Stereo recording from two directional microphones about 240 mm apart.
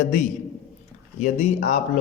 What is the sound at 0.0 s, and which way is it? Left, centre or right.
A man's voice, left.